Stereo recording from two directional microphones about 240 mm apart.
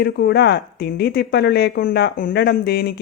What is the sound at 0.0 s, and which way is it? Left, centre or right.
Speech, left.